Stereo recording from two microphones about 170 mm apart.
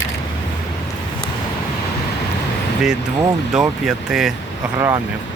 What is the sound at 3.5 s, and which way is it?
Speech, 5° right (ahead or behind).